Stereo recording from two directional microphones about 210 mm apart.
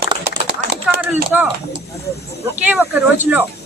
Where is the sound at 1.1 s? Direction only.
10° right (ahead or behind).